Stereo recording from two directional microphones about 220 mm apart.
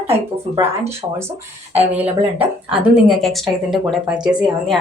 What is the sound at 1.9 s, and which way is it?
A woman's voice, 5° right (ahead or behind).